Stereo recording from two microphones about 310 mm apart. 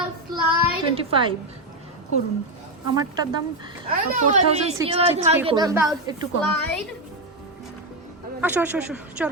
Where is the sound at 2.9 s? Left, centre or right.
Centre.